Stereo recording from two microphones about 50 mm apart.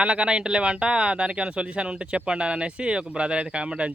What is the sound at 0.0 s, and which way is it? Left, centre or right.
Speech, right.